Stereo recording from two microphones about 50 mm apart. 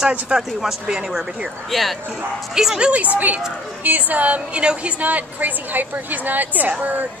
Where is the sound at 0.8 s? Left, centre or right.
Centre.